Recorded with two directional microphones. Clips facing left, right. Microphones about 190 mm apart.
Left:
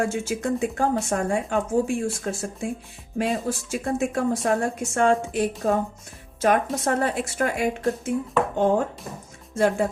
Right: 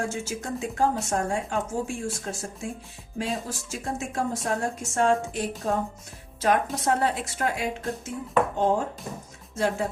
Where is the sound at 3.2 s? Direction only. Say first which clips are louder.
Left 6 dB; 60° left (ahead or behind).